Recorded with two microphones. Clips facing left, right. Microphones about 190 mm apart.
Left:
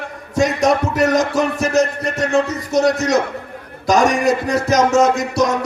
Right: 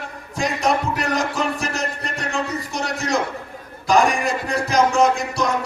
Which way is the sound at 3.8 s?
45° left (ahead or behind).